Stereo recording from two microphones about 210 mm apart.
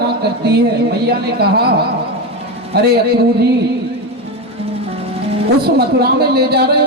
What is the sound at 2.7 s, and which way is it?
Speech, 50° right (ahead or behind).